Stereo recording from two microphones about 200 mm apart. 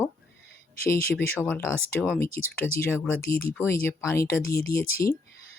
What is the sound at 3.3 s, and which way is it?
Speech, 50° left (ahead or behind).